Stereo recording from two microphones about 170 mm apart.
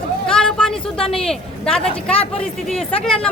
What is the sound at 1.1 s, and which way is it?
Speech, 5° left (ahead or behind).